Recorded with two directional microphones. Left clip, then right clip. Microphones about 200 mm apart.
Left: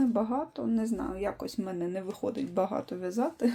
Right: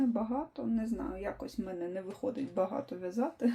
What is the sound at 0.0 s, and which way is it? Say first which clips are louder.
Speech: left 4 dB; 35° left (ahead or behind).